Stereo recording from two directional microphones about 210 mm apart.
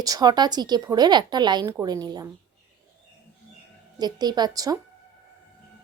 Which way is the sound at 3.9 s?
20° right (ahead or behind).